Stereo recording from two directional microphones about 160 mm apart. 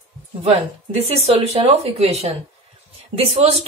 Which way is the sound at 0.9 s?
40° right (ahead or behind).